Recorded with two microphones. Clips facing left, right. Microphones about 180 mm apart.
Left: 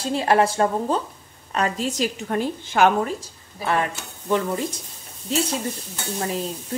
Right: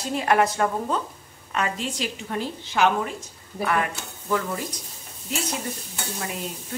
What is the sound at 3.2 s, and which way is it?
Speech, 30° left (ahead or behind).